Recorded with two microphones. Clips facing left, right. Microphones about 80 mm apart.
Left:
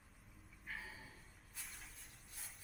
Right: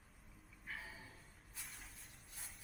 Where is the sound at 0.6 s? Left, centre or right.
Centre.